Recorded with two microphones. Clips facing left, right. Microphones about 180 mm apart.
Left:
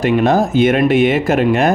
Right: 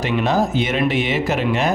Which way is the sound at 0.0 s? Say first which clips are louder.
Left 5 dB; 50° left (ahead or behind).